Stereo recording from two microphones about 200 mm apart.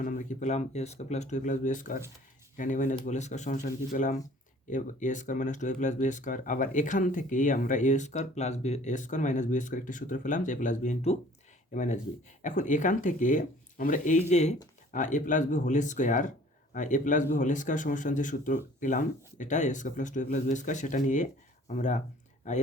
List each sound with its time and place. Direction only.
0.0 s speech: 40° left (ahead or behind)